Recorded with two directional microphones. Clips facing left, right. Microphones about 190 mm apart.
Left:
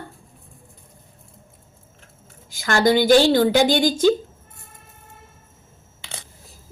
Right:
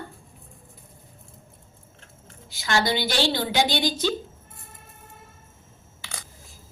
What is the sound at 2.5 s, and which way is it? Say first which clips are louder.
A woman's voice: left 7 dB; 50° left (ahead or behind).